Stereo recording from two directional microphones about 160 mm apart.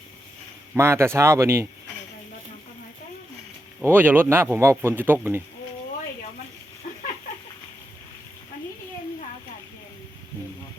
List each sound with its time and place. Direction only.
0.7 s speech: 15° right (ahead or behind)
3.8 s speech: 10° right (ahead or behind)